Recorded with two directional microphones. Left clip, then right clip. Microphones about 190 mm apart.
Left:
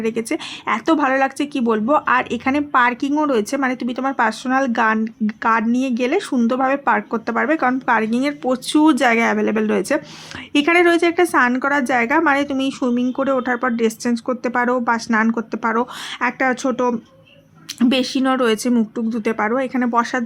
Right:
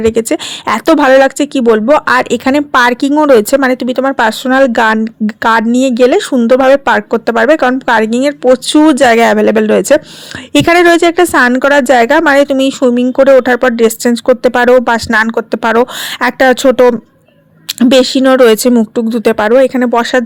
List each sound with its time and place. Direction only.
0.0 s a woman's voice: 40° right (ahead or behind)